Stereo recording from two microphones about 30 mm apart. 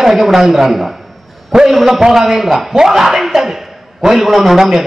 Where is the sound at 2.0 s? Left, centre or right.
Centre.